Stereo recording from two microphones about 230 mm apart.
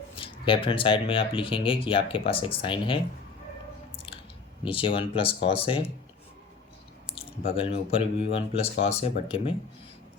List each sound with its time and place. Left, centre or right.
0.2 s speech: left
3.9 s squish: left
4.6 s speech: left
7.1 s speech: left